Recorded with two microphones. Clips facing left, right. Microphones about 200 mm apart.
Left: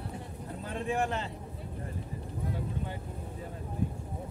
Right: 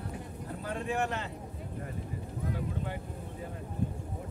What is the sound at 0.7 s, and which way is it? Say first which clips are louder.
Speech: left 1 dB; 30° left (ahead or behind).